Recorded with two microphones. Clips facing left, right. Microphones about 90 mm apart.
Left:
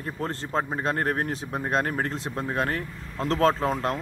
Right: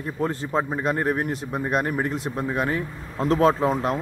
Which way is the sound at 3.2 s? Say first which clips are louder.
Right 3 dB; 15° right (ahead or behind).